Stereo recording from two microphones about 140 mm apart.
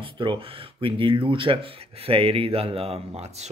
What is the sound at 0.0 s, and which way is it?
Speech, 35° right (ahead or behind).